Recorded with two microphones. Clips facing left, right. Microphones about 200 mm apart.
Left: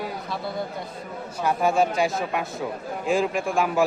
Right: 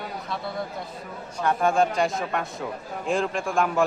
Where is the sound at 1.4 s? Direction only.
5° left (ahead or behind).